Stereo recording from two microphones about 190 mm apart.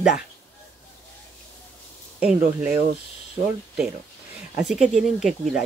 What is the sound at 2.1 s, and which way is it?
Speech, 10° right (ahead or behind).